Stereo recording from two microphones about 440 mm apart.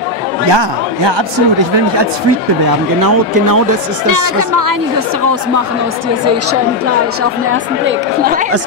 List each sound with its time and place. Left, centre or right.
0.5 s speech: right
4.1 s speech: right